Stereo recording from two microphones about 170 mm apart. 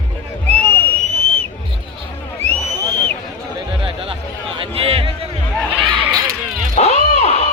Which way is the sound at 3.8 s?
35° right (ahead or behind).